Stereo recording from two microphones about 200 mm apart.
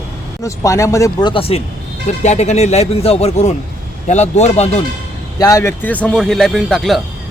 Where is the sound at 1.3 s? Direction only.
30° left (ahead or behind).